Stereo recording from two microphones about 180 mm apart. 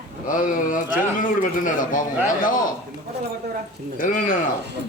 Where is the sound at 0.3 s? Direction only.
50° left (ahead or behind).